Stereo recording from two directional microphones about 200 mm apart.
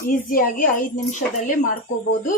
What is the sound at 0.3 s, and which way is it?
Speech, 45° left (ahead or behind).